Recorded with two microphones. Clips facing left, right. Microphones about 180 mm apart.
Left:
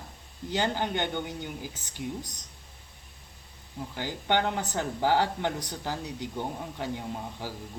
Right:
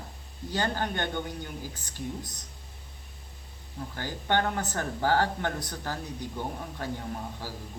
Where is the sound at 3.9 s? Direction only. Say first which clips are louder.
Even; 15° left (ahead or behind).